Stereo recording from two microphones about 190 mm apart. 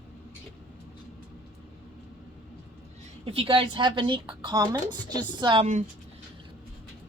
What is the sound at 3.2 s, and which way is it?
Speech, 30° right (ahead or behind).